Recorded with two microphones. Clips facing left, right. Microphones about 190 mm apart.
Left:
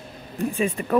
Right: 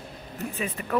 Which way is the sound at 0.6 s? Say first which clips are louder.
Left 6 dB; 25° left (ahead or behind).